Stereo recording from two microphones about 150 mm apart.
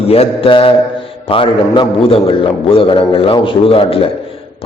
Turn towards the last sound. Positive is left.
turn(degrees=40)  # may be behind; listen again after turning